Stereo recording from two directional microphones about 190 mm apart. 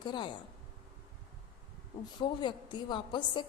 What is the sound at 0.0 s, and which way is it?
Speech, 25° left (ahead or behind).